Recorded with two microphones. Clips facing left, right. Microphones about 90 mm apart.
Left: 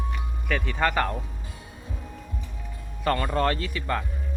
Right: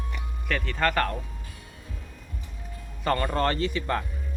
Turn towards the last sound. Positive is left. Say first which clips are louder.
# right 2 dB
turn(degrees=0)  # may be behind; listen again after turning